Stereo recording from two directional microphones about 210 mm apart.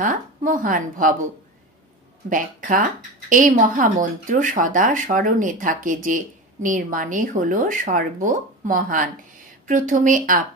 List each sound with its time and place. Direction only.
0.0 s a woman's voice: 40° right (ahead or behind)
2.2 s a woman's voice: 40° right (ahead or behind)